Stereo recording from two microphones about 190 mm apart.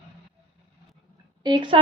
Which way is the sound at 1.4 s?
25° right (ahead or behind).